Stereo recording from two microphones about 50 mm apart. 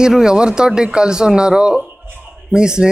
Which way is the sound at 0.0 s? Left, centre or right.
Centre.